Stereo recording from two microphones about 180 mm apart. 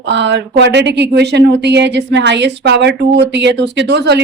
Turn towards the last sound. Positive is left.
turn(degrees=-70)  # may be behind; listen again after turning